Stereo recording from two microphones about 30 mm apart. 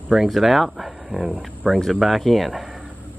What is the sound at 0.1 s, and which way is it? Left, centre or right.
Speech, centre.